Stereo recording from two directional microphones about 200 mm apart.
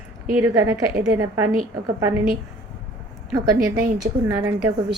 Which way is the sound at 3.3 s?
20° right (ahead or behind).